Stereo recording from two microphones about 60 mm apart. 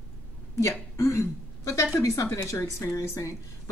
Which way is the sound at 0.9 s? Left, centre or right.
Left.